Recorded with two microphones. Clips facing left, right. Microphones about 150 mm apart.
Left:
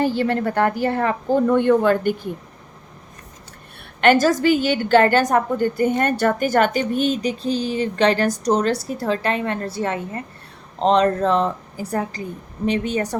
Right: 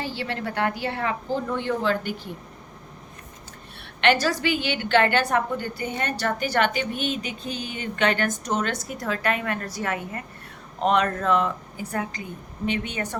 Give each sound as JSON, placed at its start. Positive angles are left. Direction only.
{"t": 0.0, "sound": "speech", "side_deg": 50}
{"t": 4.0, "sound": "a woman's voice", "side_deg": 45}